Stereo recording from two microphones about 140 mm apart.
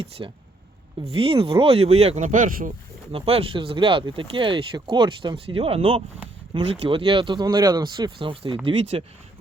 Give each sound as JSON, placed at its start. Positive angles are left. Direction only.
{"t": 0.2, "sound": "speech", "side_deg": -30}
{"t": 3.1, "sound": "speech", "side_deg": -40}